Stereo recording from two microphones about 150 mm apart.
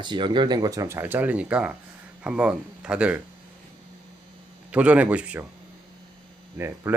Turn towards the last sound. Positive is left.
turn(degrees=-15)  # may be behind; listen again after turning